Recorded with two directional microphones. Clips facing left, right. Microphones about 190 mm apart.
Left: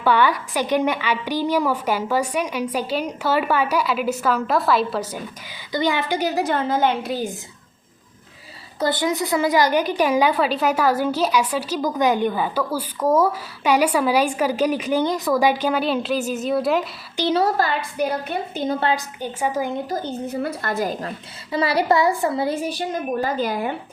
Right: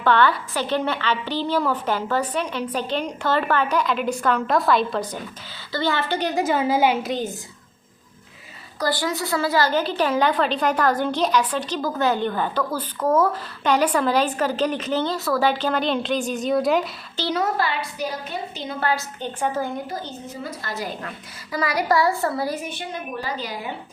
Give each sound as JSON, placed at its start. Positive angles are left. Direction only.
{"t": 0.0, "sound": "a woman's voice", "side_deg": 10}
{"t": 8.8, "sound": "a woman's voice", "side_deg": 20}
{"t": 17.3, "sound": "a woman's voice", "side_deg": 40}
{"t": 18.8, "sound": "a woman's voice", "side_deg": 20}
{"t": 19.2, "sound": "a woman's voice", "side_deg": 10}
{"t": 19.9, "sound": "a woman's voice", "side_deg": 55}
{"t": 21.5, "sound": "a woman's voice", "side_deg": 30}